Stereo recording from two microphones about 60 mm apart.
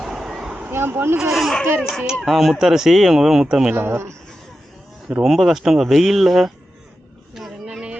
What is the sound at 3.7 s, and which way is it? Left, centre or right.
Speech, right.